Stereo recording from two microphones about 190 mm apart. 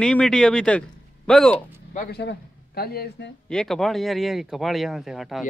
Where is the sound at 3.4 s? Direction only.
5° left (ahead or behind).